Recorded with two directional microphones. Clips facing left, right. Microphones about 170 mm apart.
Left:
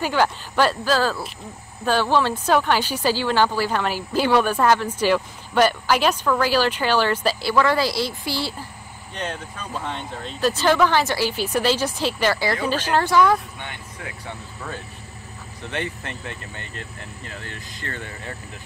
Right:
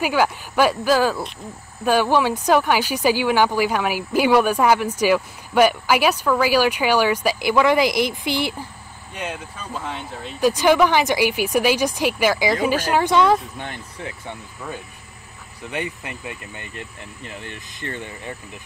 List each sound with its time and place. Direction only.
0.0 s speech: 10° right (ahead or behind)
13.1 s speech: 25° right (ahead or behind)
15.6 s speech: 10° right (ahead or behind)